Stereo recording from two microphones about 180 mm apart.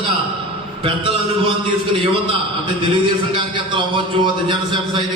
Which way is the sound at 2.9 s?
25° right (ahead or behind).